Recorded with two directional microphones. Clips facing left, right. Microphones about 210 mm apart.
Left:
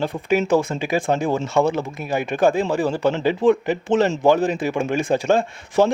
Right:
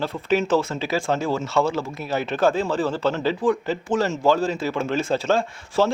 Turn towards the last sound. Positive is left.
turn(degrees=15)  # may be behind; listen again after turning